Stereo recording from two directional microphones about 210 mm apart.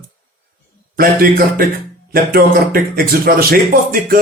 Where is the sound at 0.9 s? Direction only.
45° right (ahead or behind).